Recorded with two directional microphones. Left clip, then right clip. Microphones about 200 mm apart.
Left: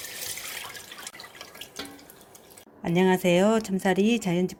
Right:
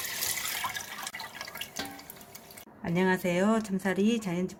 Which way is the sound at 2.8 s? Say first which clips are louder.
Left 5 dB; 25° left (ahead or behind).